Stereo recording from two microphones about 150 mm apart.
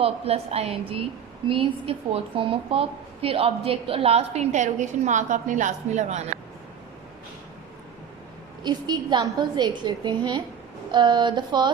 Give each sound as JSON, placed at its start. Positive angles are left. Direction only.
{"t": 0.0, "sound": "a woman's voice", "side_deg": -45}
{"t": 8.6, "sound": "a woman's voice", "side_deg": -30}